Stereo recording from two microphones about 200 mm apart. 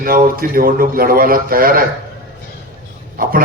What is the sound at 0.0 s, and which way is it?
A man's voice, 45° right (ahead or behind).